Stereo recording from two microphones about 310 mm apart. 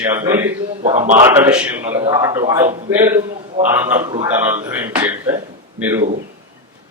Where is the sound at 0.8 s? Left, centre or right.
Right.